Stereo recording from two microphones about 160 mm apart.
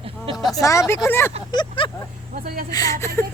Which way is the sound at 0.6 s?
20° left (ahead or behind).